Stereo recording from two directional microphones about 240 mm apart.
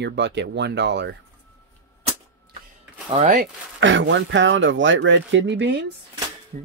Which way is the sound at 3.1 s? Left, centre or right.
Right.